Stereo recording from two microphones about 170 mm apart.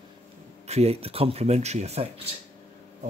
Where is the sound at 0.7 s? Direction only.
40° right (ahead or behind).